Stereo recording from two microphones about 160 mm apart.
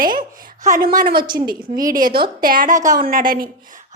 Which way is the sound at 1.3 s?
25° right (ahead or behind).